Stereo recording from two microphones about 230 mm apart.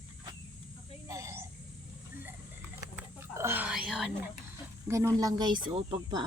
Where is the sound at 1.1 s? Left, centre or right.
Centre.